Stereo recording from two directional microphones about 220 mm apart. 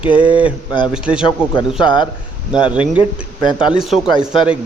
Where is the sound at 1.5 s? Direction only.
20° left (ahead or behind).